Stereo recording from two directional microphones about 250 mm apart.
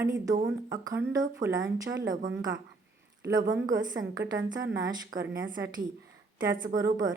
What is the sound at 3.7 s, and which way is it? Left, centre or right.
Speech, right.